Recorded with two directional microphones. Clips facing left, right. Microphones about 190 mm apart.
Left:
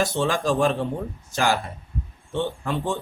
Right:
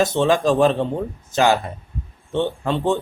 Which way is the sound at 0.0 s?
20° right (ahead or behind).